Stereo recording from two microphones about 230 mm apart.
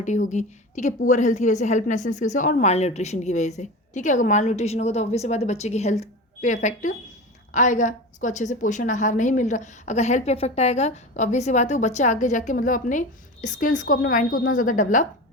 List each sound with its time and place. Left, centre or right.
0.0 s a woman's voice: left